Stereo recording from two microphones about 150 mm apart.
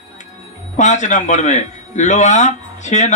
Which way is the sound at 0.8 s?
50° left (ahead or behind).